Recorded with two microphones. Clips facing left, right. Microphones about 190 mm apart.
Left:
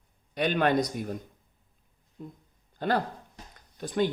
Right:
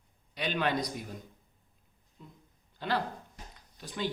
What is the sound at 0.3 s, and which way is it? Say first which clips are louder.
Speech: left 6 dB; 50° left (ahead or behind).